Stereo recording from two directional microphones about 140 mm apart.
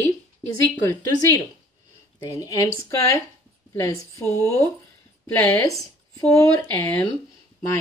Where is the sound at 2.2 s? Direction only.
25° left (ahead or behind).